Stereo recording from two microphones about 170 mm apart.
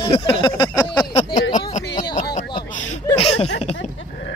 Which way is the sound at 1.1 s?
40° left (ahead or behind).